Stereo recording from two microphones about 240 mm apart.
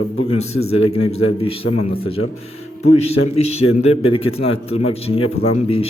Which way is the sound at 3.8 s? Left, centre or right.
Left.